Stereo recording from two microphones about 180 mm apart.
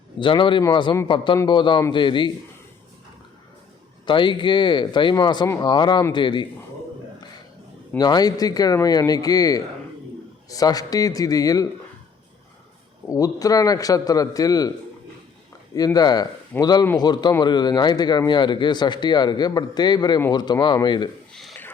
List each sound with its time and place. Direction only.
0.2 s speech: 25° left (ahead or behind)
4.0 s speech: 25° left (ahead or behind)
7.9 s speech: 20° left (ahead or behind)
13.1 s speech: 20° left (ahead or behind)
15.7 s speech: 20° left (ahead or behind)